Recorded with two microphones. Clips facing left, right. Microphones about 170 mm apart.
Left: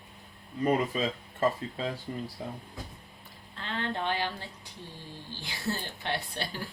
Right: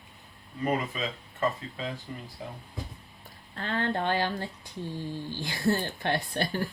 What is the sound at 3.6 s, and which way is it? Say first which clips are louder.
A woman's voice: right 4 dB; 50° right (ahead or behind).